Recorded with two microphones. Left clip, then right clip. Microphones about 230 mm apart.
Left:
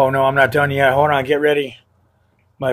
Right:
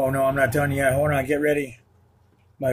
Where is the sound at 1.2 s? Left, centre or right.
Left.